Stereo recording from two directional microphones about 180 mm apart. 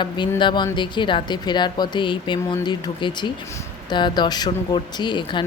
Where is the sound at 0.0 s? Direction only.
25° left (ahead or behind).